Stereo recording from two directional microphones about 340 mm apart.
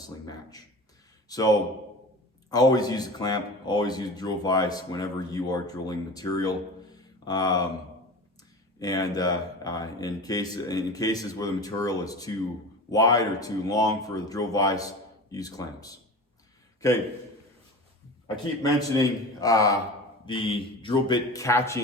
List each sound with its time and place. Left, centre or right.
0.0 s speech: centre
8.8 s speech: centre
18.6 s speech: centre